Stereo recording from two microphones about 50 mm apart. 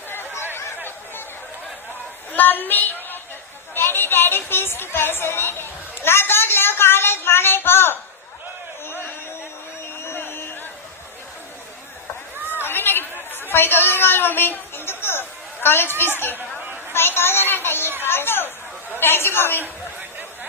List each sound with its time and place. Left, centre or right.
0.1 s chatter: left
2.3 s a sound: left
3.8 s speech: left
8.9 s a sound: left
12.5 s chatter: left
16.0 s a child's voice: left
20.0 s chatter: right